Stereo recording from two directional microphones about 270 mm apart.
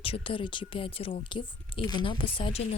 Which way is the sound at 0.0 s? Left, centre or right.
Centre.